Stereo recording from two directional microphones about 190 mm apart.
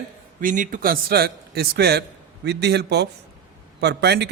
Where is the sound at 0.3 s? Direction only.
45° right (ahead or behind).